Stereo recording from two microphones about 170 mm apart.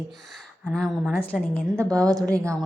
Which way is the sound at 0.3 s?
Centre (ahead or behind).